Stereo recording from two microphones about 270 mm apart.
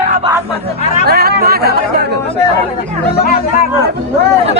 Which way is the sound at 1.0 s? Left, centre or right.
Right.